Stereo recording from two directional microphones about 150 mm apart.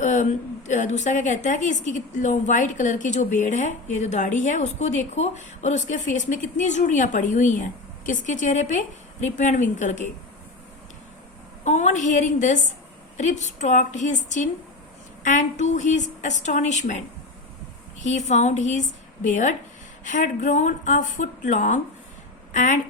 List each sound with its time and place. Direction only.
0.0 s a sound: 55° left (ahead or behind)
0.7 s a woman's voice: 55° left (ahead or behind)
11.6 s a woman's voice: 50° left (ahead or behind)
18.0 s a woman's voice: 50° left (ahead or behind)